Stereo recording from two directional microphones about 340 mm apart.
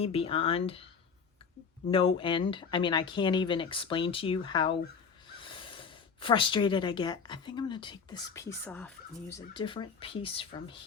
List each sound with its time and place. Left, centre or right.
0.0 s speech: centre
1.9 s speech: centre